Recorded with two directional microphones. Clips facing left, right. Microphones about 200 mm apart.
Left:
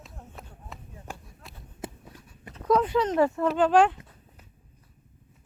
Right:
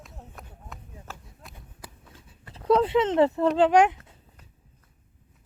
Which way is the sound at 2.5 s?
30° right (ahead or behind).